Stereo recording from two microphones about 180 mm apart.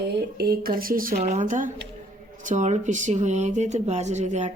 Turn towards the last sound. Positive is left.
turn(degrees=-40)  # may be behind; listen again after turning